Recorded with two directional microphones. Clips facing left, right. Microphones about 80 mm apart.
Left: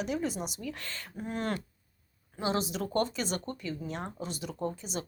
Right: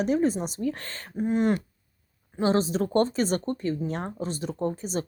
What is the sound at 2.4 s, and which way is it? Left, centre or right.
Speech, right.